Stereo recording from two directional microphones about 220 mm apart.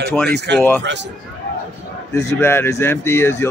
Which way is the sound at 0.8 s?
50° right (ahead or behind).